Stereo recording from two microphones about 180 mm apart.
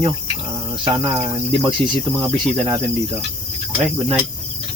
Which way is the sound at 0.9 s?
15° right (ahead or behind).